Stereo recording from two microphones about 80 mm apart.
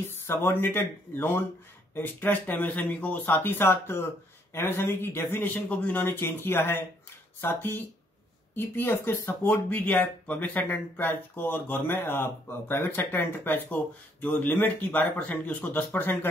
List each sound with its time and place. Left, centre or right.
0.1 s speech: left
8.5 s speech: left